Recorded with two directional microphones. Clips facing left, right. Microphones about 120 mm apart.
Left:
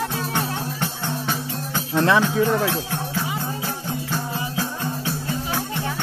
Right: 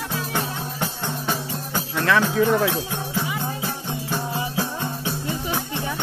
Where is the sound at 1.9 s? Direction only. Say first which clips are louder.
Left 3 dB; 25° left (ahead or behind).